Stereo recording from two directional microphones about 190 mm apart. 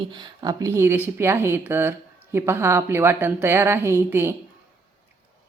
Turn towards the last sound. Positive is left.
turn(degrees=-15)  # may be behind; listen again after turning